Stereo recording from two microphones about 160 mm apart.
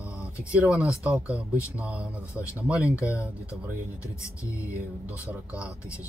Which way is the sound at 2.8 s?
20° left (ahead or behind).